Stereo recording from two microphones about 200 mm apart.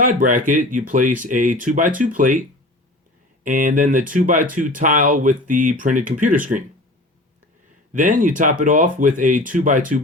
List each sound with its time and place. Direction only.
0.0 s speech: 40° right (ahead or behind)
3.4 s speech: 40° right (ahead or behind)
7.9 s speech: 40° right (ahead or behind)